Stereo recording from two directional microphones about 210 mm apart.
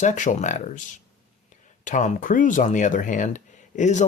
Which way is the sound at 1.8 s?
35° left (ahead or behind).